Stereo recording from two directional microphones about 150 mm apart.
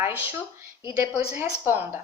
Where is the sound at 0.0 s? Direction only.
15° right (ahead or behind).